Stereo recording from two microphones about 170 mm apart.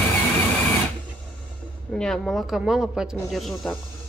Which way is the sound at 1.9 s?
5° left (ahead or behind).